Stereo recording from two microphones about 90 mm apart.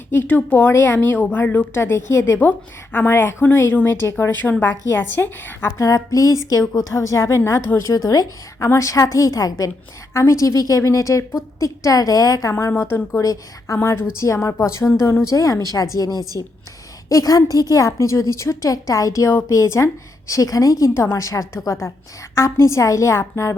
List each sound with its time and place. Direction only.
0.1 s a woman's voice: 20° left (ahead or behind)